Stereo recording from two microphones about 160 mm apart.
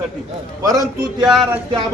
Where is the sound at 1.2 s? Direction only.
5° right (ahead or behind).